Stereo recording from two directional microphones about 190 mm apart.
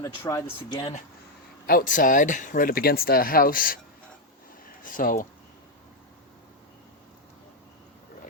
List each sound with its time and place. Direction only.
0.3 s speech: 15° left (ahead or behind)
1.6 s speech: 50° left (ahead or behind)
4.8 s speech: 45° left (ahead or behind)